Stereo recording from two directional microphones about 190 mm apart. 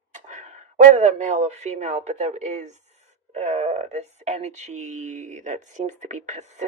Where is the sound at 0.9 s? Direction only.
40° right (ahead or behind).